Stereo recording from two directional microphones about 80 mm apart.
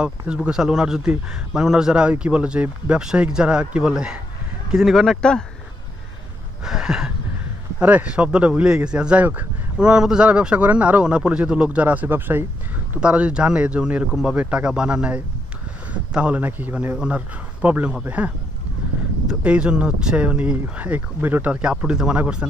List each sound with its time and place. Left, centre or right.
0.3 s speech: centre
4.7 s speech: centre
6.6 s speech: centre